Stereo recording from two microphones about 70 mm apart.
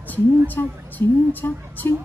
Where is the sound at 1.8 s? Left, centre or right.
Left.